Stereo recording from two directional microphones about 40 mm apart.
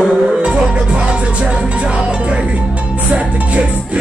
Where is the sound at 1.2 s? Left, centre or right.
Right.